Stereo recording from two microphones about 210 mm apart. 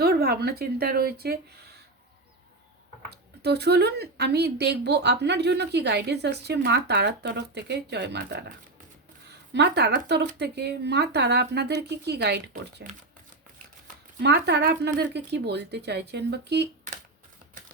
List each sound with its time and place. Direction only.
0.0 s speech: 50° right (ahead or behind)
3.1 s speech: 50° right (ahead or behind)
14.2 s speech: 55° right (ahead or behind)